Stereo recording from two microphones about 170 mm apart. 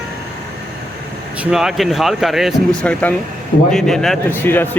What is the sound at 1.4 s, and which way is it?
Speech, 5° right (ahead or behind).